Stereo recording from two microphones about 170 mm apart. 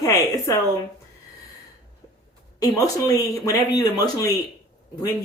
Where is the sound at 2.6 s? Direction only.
20° left (ahead or behind).